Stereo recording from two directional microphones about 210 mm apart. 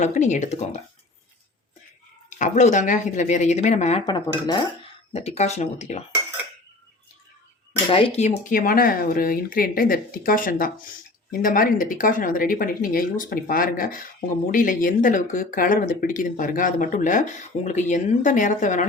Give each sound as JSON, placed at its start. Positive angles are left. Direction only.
{"t": 0.0, "sound": "speech", "side_deg": 35}
{"t": 2.4, "sound": "speech", "side_deg": 35}
{"t": 4.0, "sound": "speech", "side_deg": 20}
{"t": 5.1, "sound": "speech", "side_deg": 30}
{"t": 7.9, "sound": "speech", "side_deg": 30}